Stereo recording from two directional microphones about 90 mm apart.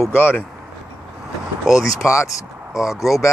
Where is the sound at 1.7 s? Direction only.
Centre (ahead or behind).